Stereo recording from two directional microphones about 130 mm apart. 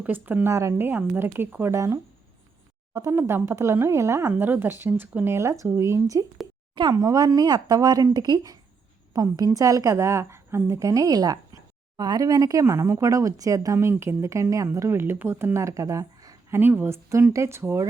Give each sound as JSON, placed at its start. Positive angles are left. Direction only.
{"t": 0.0, "sound": "a woman's voice", "side_deg": -15}
{"t": 3.2, "sound": "a woman's voice", "side_deg": -15}